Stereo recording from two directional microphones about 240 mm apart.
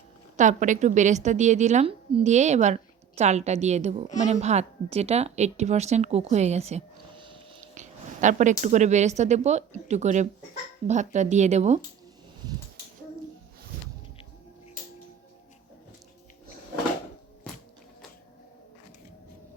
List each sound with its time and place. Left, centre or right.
0.3 s a woman's voice: right